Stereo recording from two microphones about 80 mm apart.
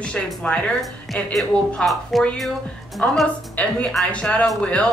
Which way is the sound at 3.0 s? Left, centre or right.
Centre.